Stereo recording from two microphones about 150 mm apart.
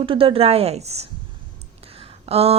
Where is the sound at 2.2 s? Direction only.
40° right (ahead or behind).